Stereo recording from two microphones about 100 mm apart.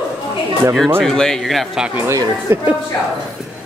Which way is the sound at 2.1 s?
30° right (ahead or behind).